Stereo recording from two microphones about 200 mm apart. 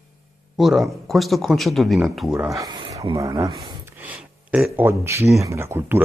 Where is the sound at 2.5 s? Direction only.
20° right (ahead or behind).